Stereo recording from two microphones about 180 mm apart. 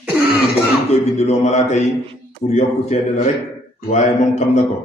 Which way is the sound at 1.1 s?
35° left (ahead or behind).